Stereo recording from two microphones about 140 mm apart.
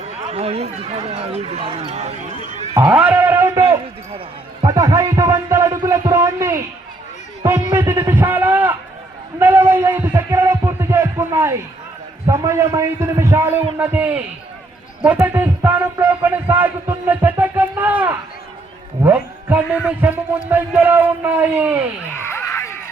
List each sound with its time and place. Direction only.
0.0 s speech: 45° right (ahead or behind)
2.8 s a man's voice: 10° right (ahead or behind)
4.6 s a man's voice: 25° right (ahead or behind)
7.7 s a sound: 15° right (ahead or behind)
12.3 s a man's voice: 20° right (ahead or behind)
22.3 s a sound: 20° left (ahead or behind)